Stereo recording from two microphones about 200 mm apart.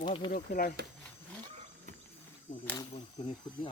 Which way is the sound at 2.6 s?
10° left (ahead or behind).